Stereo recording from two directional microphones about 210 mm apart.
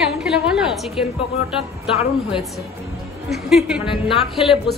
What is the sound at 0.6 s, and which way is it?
Speech, centre (ahead or behind).